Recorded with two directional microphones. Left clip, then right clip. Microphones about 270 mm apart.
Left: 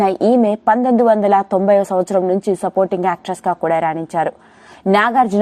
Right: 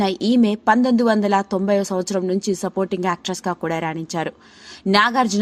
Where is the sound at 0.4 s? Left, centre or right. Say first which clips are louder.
Left 3 dB; centre.